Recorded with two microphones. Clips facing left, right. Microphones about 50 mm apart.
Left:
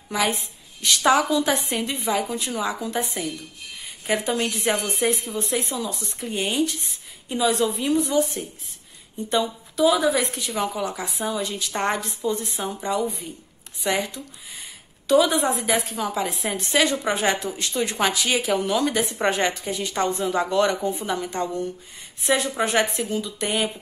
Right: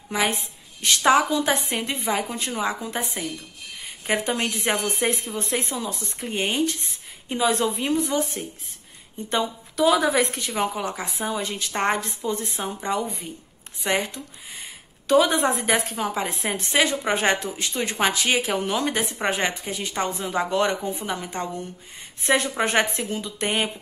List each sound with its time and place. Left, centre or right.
0.7 s a woman's voice: right
4.1 s a woman's voice: right
9.8 s a woman's voice: right
10.5 s a woman's voice: right
17.1 s a woman's voice: right
19.1 s a woman's voice: centre; by 23.7 s right